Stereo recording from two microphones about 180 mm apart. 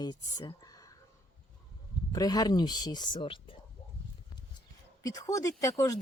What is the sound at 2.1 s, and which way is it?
Speech, 20° left (ahead or behind).